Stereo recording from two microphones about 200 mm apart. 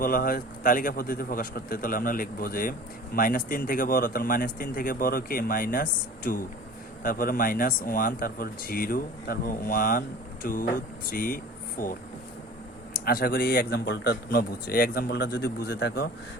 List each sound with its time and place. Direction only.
0.0 s speech: 45° left (ahead or behind)
13.1 s speech: 50° left (ahead or behind)